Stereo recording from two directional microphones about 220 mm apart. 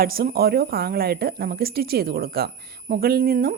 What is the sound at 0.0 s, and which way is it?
Speech, 40° right (ahead or behind).